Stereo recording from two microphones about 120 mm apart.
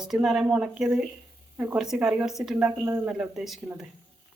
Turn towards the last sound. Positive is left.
turn(degrees=0)  # may be behind; listen again after turning